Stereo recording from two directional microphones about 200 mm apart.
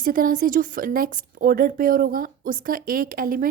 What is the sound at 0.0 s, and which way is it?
A woman's voice, 45° right (ahead or behind).